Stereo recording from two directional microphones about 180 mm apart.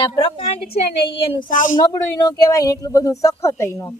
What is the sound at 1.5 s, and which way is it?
Speech, 45° left (ahead or behind).